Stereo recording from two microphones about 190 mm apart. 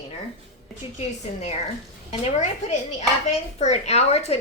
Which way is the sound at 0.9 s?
35° left (ahead or behind).